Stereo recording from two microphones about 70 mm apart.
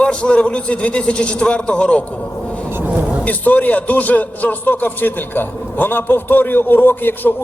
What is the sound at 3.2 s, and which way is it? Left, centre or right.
A man's voice, left.